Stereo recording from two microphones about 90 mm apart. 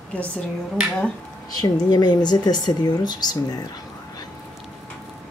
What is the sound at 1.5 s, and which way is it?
Speech, 50° left (ahead or behind).